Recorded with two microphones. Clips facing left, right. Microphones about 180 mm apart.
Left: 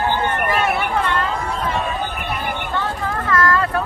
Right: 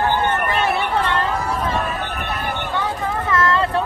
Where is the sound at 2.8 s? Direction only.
20° right (ahead or behind).